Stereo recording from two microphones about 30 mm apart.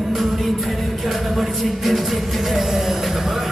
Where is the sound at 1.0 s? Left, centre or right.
Centre.